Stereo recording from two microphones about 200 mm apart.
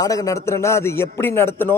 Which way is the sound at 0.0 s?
15° left (ahead or behind).